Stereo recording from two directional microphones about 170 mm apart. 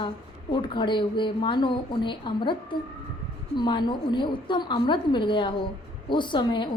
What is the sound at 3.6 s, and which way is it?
A woman's voice, 25° left (ahead or behind).